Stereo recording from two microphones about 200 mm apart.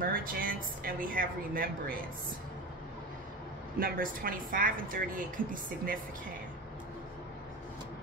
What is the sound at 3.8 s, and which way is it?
A woman's voice, 45° right (ahead or behind).